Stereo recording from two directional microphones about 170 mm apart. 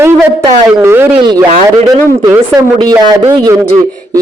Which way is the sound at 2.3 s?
15° right (ahead or behind).